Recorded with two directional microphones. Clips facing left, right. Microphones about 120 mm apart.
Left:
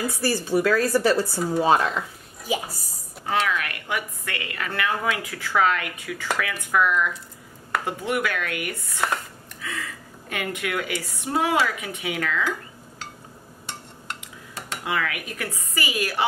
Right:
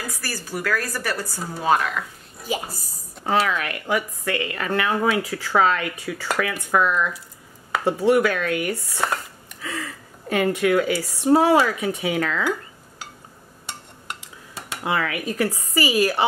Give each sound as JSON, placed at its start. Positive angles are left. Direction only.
{"t": 0.2, "sound": "speech", "side_deg": 25}
{"t": 3.3, "sound": "a woman's voice", "side_deg": -35}
{"t": 10.3, "sound": "a woman's voice", "side_deg": -35}
{"t": 14.9, "sound": "a woman's voice", "side_deg": -30}